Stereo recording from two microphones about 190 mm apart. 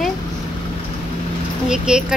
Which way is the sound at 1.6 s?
5° right (ahead or behind).